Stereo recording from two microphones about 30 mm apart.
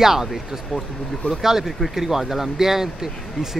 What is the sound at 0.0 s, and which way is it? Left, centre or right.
Speech, centre.